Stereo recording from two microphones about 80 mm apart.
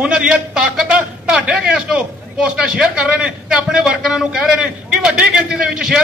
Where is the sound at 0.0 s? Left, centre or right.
Centre.